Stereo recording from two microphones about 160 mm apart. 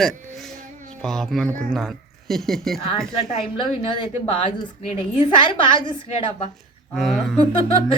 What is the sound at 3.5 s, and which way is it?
A woman's voice, 30° left (ahead or behind).